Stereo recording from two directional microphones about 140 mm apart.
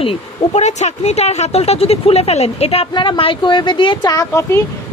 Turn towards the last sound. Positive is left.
turn(degrees=20)  # may be behind; listen again after turning